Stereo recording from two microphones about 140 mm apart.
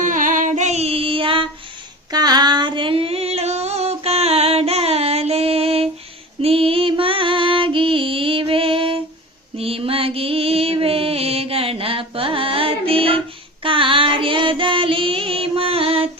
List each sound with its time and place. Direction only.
0.0 s music: 70° right (ahead or behind); by 1.5 s 40° right (ahead or behind)
2.1 s female singing: 30° right (ahead or behind); by 5.9 s 45° right (ahead or behind)
6.4 s music: 40° right (ahead or behind)
13.6 s female singing: 40° right (ahead or behind)